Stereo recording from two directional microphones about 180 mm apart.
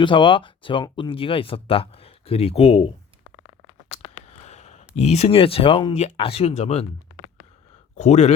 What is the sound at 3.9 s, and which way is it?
Speech, 35° left (ahead or behind).